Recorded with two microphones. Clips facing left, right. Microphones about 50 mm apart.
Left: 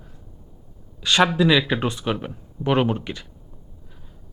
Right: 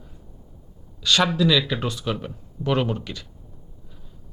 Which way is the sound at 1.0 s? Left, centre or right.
Left.